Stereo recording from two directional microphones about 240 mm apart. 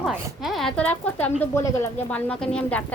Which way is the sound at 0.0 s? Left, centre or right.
Centre.